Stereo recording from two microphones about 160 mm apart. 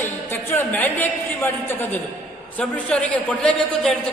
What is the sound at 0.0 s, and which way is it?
A man's voice, 15° left (ahead or behind).